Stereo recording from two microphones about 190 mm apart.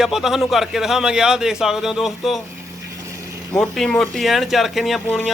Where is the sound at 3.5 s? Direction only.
5° left (ahead or behind).